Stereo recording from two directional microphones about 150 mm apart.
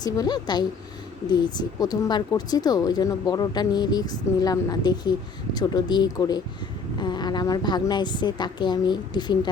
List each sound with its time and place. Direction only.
0.0 s a woman's voice: 25° left (ahead or behind)